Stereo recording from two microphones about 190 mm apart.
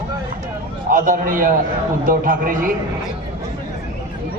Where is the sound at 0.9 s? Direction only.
45° right (ahead or behind).